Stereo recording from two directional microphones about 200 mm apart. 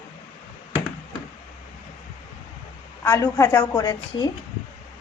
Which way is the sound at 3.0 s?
15° left (ahead or behind).